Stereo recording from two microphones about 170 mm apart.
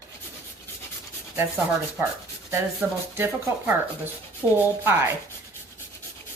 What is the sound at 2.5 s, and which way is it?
Speech, 10° right (ahead or behind).